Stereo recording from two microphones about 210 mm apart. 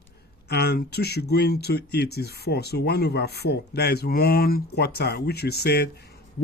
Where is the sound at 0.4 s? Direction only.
50° left (ahead or behind).